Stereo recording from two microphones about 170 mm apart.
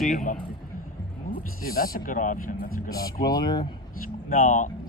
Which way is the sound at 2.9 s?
20° left (ahead or behind).